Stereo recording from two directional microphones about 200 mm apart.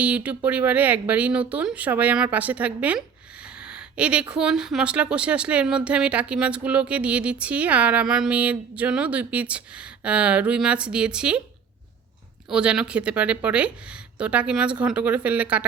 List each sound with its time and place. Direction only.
0.0 s speech: 5° right (ahead or behind)
12.5 s speech: 5° right (ahead or behind)